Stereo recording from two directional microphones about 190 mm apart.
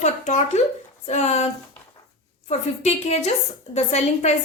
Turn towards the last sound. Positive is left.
turn(degrees=35)  # may be behind; listen again after turning